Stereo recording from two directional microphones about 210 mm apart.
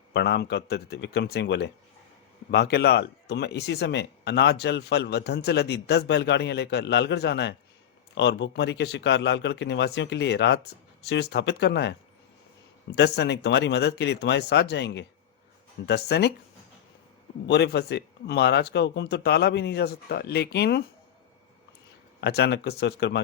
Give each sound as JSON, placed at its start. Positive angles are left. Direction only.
{"t": 0.1, "sound": "a man's voice", "side_deg": 55}
{"t": 13.0, "sound": "speech", "side_deg": 55}
{"t": 17.5, "sound": "speech", "side_deg": 55}
{"t": 22.2, "sound": "speech", "side_deg": 50}